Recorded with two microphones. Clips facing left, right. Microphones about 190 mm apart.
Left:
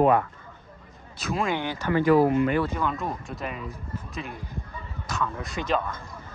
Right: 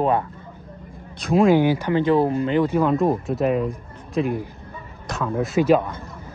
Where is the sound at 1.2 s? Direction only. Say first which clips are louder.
Right 11 dB; centre (ahead or behind); by 2.7 s 20° right (ahead or behind).